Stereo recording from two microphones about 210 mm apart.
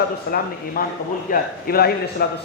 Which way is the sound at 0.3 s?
45° left (ahead or behind).